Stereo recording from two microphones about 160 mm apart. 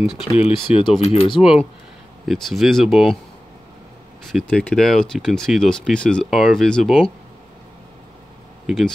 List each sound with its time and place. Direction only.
0.3 s speech: 35° left (ahead or behind)
2.2 s speech: centre (ahead or behind)
4.3 s speech: 5° left (ahead or behind)
8.6 s speech: centre (ahead or behind)